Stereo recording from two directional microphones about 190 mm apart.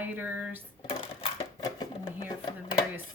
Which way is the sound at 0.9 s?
25° left (ahead or behind).